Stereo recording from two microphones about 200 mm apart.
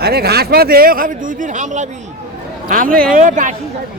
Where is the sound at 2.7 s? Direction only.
45° right (ahead or behind).